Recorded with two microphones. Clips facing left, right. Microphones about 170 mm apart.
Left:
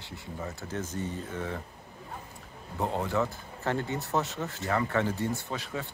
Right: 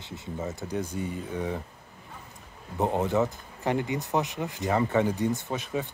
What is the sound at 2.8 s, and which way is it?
Speech, 20° right (ahead or behind).